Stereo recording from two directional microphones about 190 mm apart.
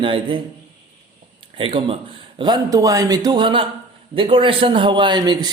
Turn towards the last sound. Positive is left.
turn(degrees=-20)  # may be behind; listen again after turning